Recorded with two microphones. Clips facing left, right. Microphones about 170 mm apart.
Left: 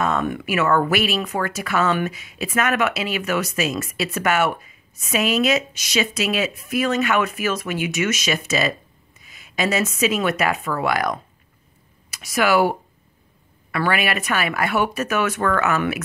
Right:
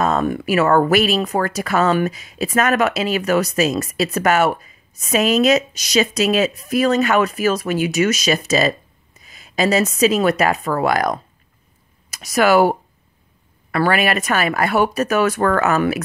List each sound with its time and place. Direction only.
0.0 s speech: 35° right (ahead or behind)